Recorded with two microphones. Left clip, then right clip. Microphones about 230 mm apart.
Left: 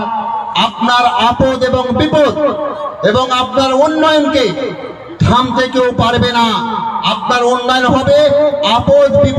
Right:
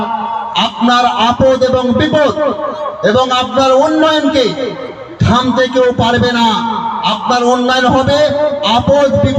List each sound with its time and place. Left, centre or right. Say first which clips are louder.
0.5 s a man's voice: even; left